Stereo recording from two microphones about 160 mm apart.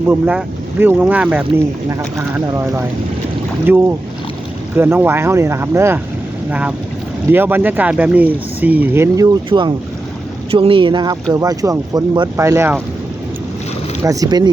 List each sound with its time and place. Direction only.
0.1 s speech: 10° right (ahead or behind)
1.9 s speech: 20° right (ahead or behind)
14.0 s speech: 20° right (ahead or behind)